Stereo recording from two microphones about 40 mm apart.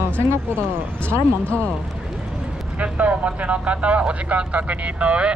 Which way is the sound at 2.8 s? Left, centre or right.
Right.